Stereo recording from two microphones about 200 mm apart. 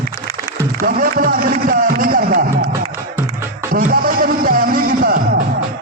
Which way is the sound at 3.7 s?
45° right (ahead or behind).